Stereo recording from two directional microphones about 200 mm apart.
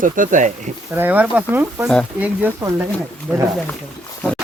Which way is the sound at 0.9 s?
10° right (ahead or behind).